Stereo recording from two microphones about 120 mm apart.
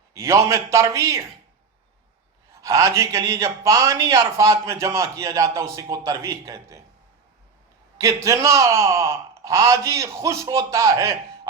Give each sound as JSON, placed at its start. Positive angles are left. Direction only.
{"t": 0.1, "sound": "a man's voice", "side_deg": -25}
{"t": 2.6, "sound": "a man's voice", "side_deg": -25}
{"t": 7.9, "sound": "a man's voice", "side_deg": -25}